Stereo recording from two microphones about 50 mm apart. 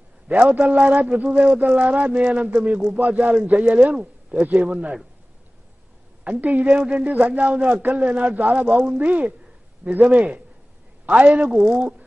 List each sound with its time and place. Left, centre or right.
0.3 s a man's voice: right
3.9 s speech: centre
4.4 s speech: right
6.2 s a man's voice: right